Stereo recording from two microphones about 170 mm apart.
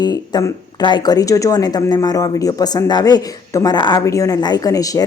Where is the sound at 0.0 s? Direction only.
20° left (ahead or behind).